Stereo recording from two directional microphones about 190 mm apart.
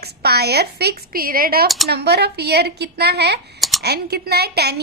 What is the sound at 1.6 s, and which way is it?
Speech, centre (ahead or behind).